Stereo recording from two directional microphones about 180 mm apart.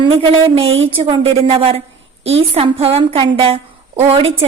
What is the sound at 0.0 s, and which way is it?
Speech, 30° right (ahead or behind).